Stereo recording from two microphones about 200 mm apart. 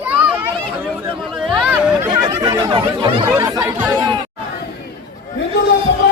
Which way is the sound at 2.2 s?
20° right (ahead or behind).